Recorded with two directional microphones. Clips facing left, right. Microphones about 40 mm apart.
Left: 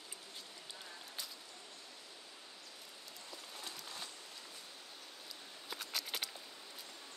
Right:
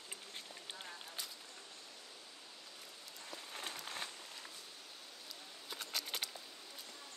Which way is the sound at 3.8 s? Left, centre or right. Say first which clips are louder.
Right 3 dB; right.